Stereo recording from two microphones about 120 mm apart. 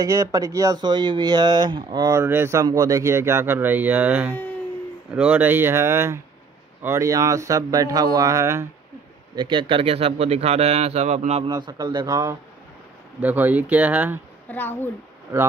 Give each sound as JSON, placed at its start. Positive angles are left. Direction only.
{"t": 0.0, "sound": "speech", "side_deg": -30}
{"t": 2.1, "sound": "speech", "side_deg": -20}
{"t": 9.3, "sound": "a man's voice", "side_deg": -40}
{"t": 11.4, "sound": "speech", "side_deg": -35}
{"t": 13.2, "sound": "speech", "side_deg": -15}
{"t": 14.5, "sound": "a woman's voice", "side_deg": 15}